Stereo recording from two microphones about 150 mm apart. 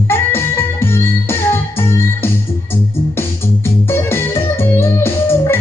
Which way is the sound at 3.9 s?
15° left (ahead or behind).